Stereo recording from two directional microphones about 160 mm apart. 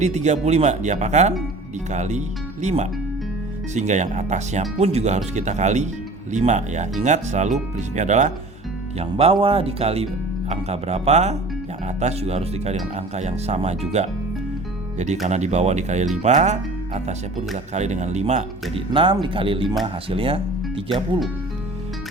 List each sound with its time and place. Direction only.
0.0 s speech: 45° right (ahead or behind)
18.9 s speech: 30° right (ahead or behind)